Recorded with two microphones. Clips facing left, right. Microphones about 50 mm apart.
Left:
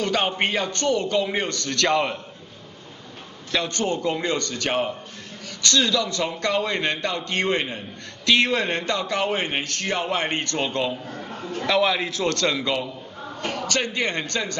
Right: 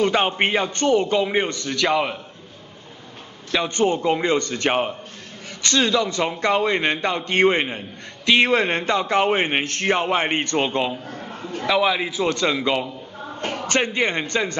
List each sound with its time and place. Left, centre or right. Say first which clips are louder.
0.0 s a man's voice: right 4 dB; right
3.5 s a man's voice: right 4 dB; centre
11.6 s a man's voice: right 1 dB; centre